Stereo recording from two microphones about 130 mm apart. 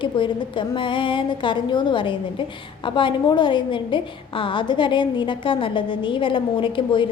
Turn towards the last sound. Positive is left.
turn(degrees=40)  # may be behind; listen again after turning